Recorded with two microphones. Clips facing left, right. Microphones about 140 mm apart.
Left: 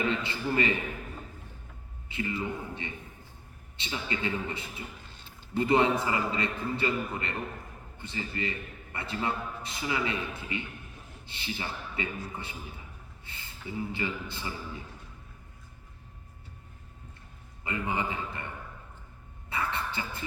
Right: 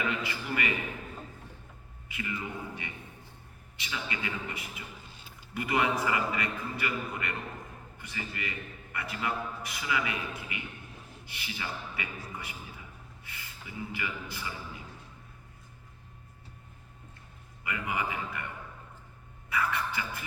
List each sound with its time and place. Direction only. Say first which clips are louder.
0.0 s a man's voice: left 3 dB; 30° left (ahead or behind)
2.0 s a man's voice: left 5 dB; 30° left (ahead or behind)
17.6 s a man's voice: left 2 dB; 30° left (ahead or behind)
19.5 s a sound: right 1 dB; 25° left (ahead or behind)